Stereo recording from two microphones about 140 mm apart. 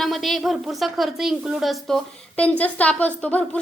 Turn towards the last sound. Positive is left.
turn(degrees=10)  # may be behind; listen again after turning